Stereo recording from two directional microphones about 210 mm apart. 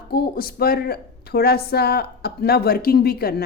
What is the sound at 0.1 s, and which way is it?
A woman's voice, 45° left (ahead or behind).